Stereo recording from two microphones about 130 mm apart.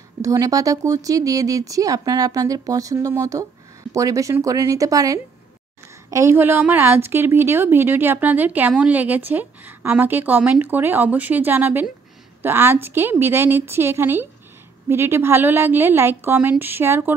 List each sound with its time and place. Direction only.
0.2 s a woman's voice: 25° right (ahead or behind)